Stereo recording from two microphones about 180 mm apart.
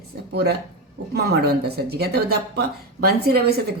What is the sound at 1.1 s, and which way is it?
Speech, 60° right (ahead or behind).